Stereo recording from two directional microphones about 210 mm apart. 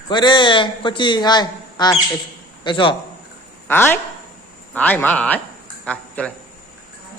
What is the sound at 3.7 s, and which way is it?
A man's voice, 10° left (ahead or behind).